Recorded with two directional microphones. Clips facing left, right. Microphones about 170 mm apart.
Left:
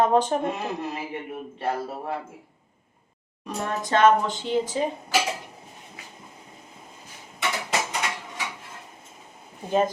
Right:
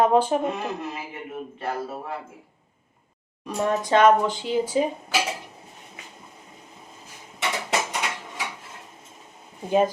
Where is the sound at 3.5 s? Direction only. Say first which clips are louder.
Right 4 dB; 10° right (ahead or behind).